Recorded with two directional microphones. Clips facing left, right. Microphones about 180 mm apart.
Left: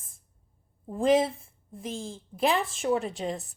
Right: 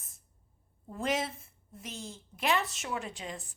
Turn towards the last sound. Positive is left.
turn(degrees=35)  # may be behind; listen again after turning